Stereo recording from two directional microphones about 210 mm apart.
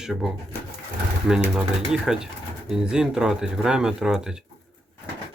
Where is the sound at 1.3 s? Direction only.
5° right (ahead or behind).